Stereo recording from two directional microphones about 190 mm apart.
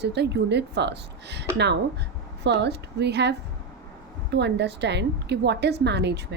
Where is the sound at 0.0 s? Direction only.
60° right (ahead or behind).